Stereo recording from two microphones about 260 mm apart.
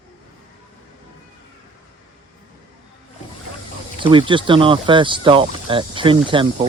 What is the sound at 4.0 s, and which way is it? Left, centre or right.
Speech, centre.